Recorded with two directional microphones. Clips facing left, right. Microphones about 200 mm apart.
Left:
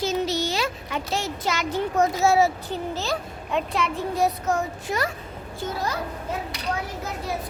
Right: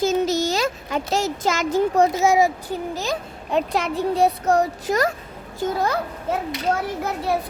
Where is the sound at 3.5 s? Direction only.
40° right (ahead or behind).